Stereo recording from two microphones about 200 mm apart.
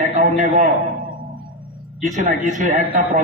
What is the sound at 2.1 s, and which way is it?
A man's voice, 40° right (ahead or behind).